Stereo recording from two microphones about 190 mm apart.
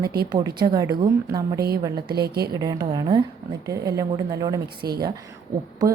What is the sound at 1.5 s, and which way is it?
Speech, 55° right (ahead or behind).